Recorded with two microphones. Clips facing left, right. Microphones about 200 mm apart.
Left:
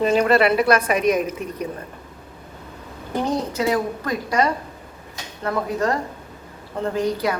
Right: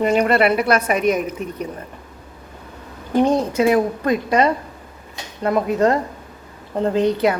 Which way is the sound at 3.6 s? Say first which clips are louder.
Right 5 dB; 20° right (ahead or behind).